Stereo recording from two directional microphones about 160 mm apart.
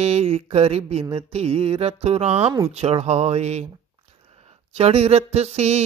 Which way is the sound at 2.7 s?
40° right (ahead or behind).